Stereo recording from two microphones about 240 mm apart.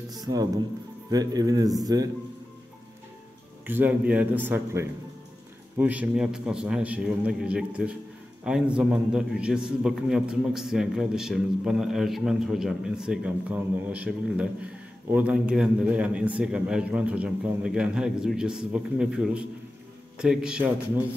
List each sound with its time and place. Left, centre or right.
0.1 s speech: centre
3.6 s a man's voice: centre